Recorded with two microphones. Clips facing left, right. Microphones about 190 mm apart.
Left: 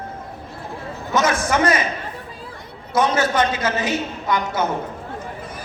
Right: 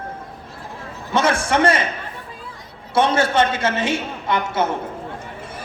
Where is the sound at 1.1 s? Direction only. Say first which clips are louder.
Right 1 dB; 30° right (ahead or behind).